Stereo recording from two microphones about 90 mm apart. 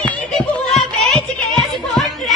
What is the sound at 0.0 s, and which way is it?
Music, 10° left (ahead or behind).